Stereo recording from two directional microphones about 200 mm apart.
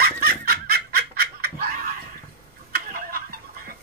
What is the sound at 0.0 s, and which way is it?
Snicker, 50° right (ahead or behind).